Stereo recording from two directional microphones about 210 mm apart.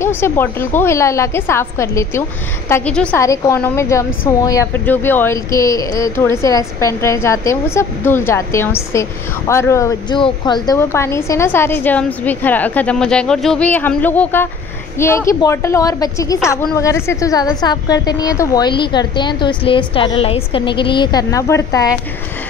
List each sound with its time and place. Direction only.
0.0 s a woman's voice: 10° left (ahead or behind)